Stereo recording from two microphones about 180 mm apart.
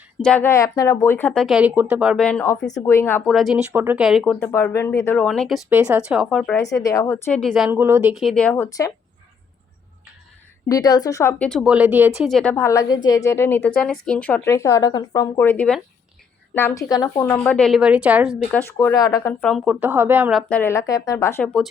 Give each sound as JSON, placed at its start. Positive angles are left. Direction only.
{"t": 0.2, "sound": "speech", "side_deg": 5}
{"t": 2.2, "sound": "speech", "side_deg": 10}
{"t": 3.2, "sound": "speech", "side_deg": 0}
{"t": 5.6, "sound": "speech", "side_deg": -10}
{"t": 6.6, "sound": "speech", "side_deg": 20}
{"t": 7.4, "sound": "speech", "side_deg": 0}
{"t": 7.7, "sound": "speech", "side_deg": -10}
{"t": 8.1, "sound": "speech", "side_deg": 0}
{"t": 10.7, "sound": "speech", "side_deg": 20}
{"t": 11.7, "sound": "speech", "side_deg": -10}
{"t": 18.5, "sound": "speech", "side_deg": 15}
{"t": 19.4, "sound": "speech", "side_deg": 0}
{"t": 20.5, "sound": "speech", "side_deg": 15}